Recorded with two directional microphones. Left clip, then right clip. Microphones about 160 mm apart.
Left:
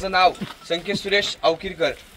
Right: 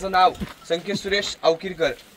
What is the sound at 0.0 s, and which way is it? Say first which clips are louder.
A man's voice: even; 25° left (ahead or behind).